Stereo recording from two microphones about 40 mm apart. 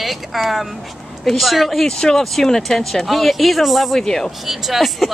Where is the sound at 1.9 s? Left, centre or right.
Centre.